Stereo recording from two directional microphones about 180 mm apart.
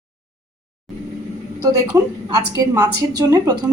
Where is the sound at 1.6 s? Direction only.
20° right (ahead or behind).